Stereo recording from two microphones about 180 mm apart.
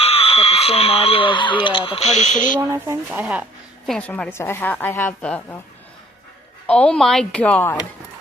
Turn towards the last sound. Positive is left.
turn(degrees=10)  # may be behind; listen again after turning